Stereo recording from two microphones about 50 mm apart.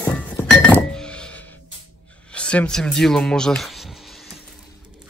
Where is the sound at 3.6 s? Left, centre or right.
Centre.